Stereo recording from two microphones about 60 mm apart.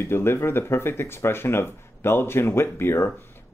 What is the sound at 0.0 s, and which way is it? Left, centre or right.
Speech, left.